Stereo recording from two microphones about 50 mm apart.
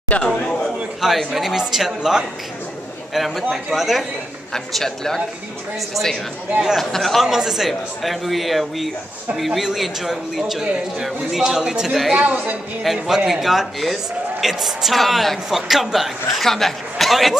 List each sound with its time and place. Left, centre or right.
0.1 s speech: left
0.7 s speech: centre
4.7 s speech: centre
6.8 s speech: centre
7.2 s speech: centre
12.2 s a woman's voice: right
12.8 s speech: centre